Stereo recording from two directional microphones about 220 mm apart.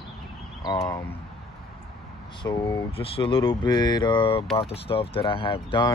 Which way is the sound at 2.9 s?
25° left (ahead or behind).